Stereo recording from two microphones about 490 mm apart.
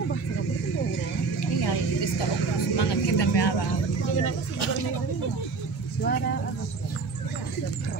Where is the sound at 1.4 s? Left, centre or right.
Left.